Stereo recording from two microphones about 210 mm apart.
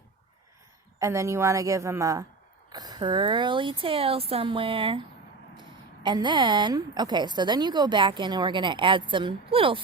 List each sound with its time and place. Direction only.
0.9 s a woman's voice: 15° right (ahead or behind)